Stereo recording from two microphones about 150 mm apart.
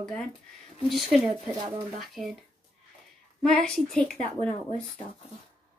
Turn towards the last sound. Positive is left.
turn(degrees=5)  # may be behind; listen again after turning